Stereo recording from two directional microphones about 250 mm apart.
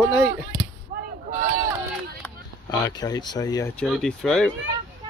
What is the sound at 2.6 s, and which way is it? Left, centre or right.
Speech, centre.